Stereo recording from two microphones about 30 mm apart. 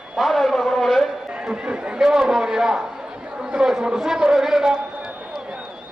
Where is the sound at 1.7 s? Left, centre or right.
Right.